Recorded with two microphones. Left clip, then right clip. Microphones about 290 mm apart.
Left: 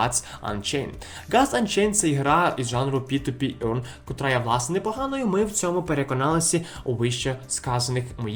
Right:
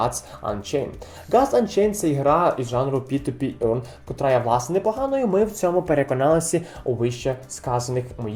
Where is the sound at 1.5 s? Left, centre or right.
Left.